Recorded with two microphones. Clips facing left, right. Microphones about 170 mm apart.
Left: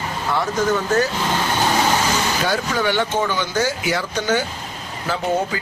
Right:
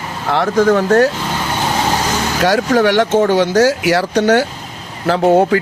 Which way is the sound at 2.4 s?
80° right.